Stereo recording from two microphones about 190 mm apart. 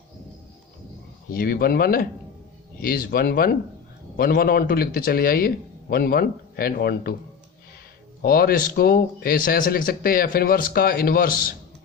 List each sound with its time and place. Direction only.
1.3 s speech: 50° left (ahead or behind)
8.2 s speech: 50° left (ahead or behind)